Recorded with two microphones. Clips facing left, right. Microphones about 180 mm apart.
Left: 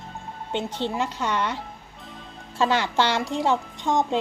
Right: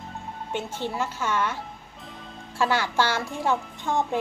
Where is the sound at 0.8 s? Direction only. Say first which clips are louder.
Left 2 dB; 20° left (ahead or behind).